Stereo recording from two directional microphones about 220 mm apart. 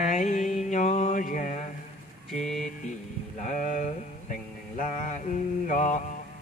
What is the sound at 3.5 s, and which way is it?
Mantra, 35° left (ahead or behind).